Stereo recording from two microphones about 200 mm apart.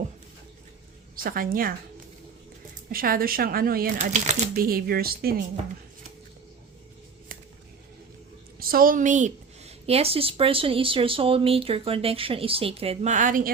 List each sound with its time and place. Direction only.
1.1 s a woman's voice: 45° right (ahead or behind)
2.9 s speech: 45° right (ahead or behind)
8.5 s a woman's voice: 45° right (ahead or behind)